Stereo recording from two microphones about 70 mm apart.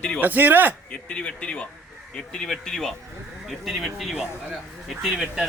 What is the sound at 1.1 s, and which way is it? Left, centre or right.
A man's voice, centre.